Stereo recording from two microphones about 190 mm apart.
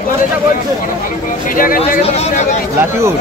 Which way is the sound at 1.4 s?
45° left (ahead or behind).